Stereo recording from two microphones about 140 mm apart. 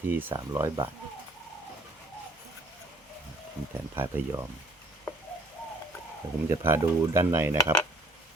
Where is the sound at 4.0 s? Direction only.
15° right (ahead or behind).